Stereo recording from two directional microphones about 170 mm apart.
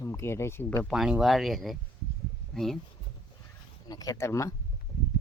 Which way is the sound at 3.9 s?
20° left (ahead or behind).